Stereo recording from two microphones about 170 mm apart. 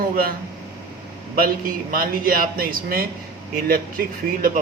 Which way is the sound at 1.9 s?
60° right (ahead or behind).